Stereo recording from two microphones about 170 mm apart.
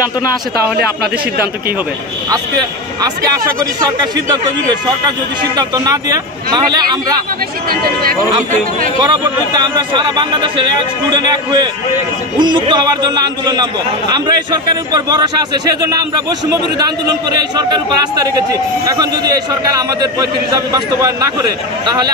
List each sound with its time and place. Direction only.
5.6 s speech: 20° right (ahead or behind)
7.7 s speech: 65° right (ahead or behind)
9.0 s speech: 25° right (ahead or behind)